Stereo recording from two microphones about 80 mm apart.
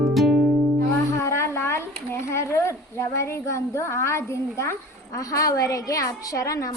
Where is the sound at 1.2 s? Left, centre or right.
Left.